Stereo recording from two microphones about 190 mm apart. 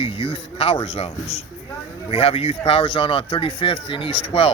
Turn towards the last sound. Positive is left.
turn(degrees=30)  # may be behind; listen again after turning